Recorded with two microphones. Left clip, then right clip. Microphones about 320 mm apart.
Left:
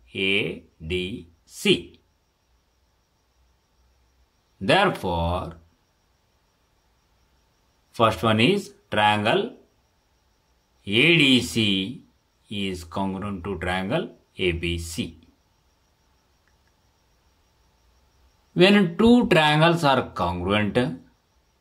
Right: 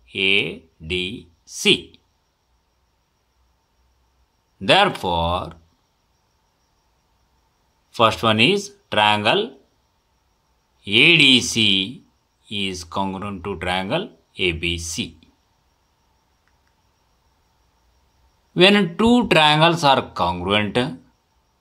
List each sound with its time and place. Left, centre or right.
0.0 s speech: centre
4.6 s speech: centre
7.9 s speech: centre
10.8 s speech: centre
18.5 s speech: centre